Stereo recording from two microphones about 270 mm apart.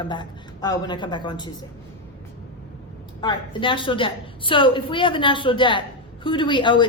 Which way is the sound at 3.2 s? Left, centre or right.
Centre.